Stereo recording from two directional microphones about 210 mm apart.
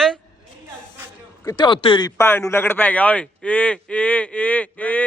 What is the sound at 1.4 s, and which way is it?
Speech, 20° left (ahead or behind).